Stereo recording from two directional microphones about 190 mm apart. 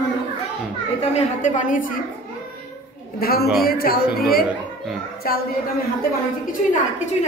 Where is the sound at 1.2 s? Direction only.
40° left (ahead or behind).